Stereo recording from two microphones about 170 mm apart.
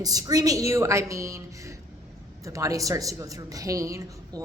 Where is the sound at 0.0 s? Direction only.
20° right (ahead or behind).